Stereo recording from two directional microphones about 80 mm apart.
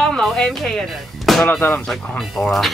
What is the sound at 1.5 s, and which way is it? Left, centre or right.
Speech, centre.